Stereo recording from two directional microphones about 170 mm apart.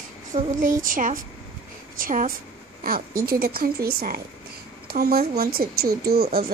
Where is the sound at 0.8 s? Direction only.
50° right (ahead or behind).